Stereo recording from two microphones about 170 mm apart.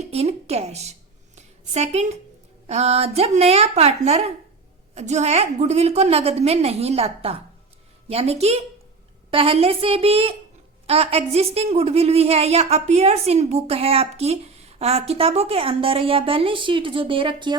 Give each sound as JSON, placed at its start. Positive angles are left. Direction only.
{"t": 0.0, "sound": "a woman's voice", "side_deg": -40}
{"t": 1.4, "sound": "a sound", "side_deg": -40}
{"t": 2.6, "sound": "a woman's voice", "side_deg": -40}